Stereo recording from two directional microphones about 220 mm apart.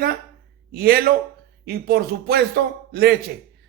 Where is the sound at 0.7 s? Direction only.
45° right (ahead or behind).